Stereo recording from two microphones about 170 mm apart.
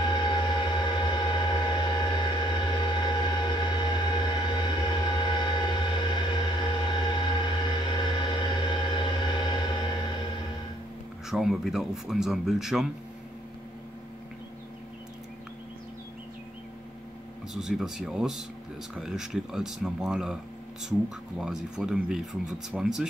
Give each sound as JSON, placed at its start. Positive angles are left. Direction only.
{"t": 0.0, "sound": "a sound", "side_deg": 25}
{"t": 11.2, "sound": "speech", "side_deg": 0}
{"t": 17.6, "sound": "speech", "side_deg": -5}
{"t": 21.4, "sound": "speech", "side_deg": -5}